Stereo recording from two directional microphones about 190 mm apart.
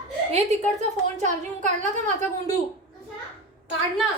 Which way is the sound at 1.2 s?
40° right (ahead or behind).